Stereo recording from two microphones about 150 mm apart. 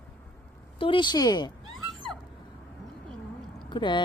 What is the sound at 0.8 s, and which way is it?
Speech, 35° left (ahead or behind).